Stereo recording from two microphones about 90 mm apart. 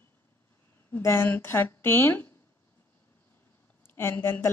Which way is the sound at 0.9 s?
25° left (ahead or behind).